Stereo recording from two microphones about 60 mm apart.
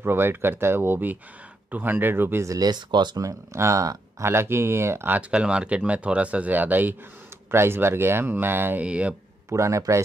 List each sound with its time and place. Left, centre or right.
0.0 s speech: right
2.4 s speech: right
3.2 s speech: right
4.2 s speech: right
5.3 s speech: centre
7.5 s speech: right
8.8 s speech: centre
9.5 s speech: right